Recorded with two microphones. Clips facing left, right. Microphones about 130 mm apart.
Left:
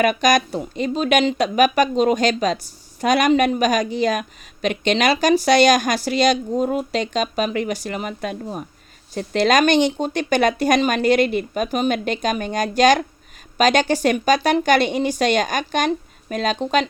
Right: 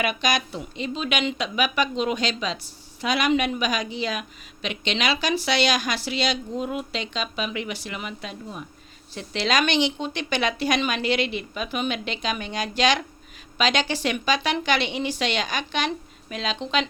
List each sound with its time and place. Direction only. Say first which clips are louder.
0.0 s a woman's voice: left 8 dB; 45° left (ahead or behind)